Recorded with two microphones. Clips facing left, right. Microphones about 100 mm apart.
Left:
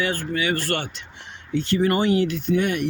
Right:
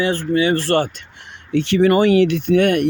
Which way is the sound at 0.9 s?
60° right (ahead or behind).